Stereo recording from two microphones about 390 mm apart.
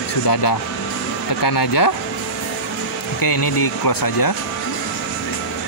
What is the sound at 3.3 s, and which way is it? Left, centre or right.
Speech, left.